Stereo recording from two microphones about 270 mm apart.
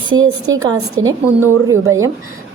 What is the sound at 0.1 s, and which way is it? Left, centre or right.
Speech, centre.